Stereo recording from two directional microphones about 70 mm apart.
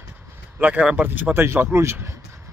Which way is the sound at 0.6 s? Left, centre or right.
Right.